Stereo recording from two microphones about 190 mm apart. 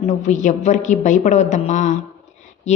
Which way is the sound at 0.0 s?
40° left (ahead or behind).